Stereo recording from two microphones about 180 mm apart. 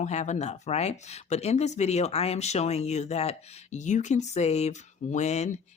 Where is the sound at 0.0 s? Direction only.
40° left (ahead or behind).